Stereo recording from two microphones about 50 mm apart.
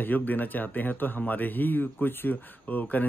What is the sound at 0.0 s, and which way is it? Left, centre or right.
Speech, left.